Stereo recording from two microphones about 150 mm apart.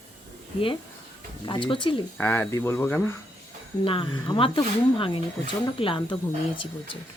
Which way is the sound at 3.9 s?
35° left (ahead or behind).